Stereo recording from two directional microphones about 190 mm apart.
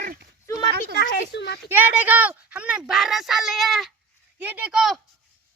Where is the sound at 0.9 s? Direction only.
60° left (ahead or behind).